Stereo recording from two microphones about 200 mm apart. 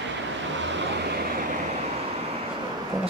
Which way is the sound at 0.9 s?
55° right (ahead or behind).